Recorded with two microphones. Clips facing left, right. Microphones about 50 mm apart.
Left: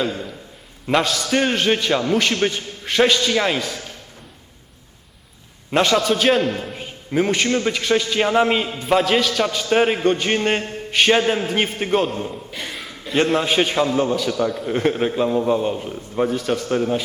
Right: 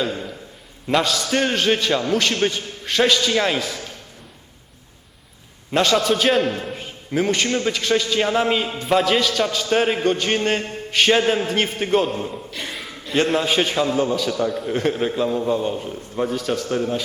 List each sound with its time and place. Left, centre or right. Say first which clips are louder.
0.0 s a man's voice: left 1 dB; centre
5.7 s a man's voice: left 1 dB; centre
8.8 s a man's voice: left 1 dB; centre
16.6 s a man's voice: left 2 dB; centre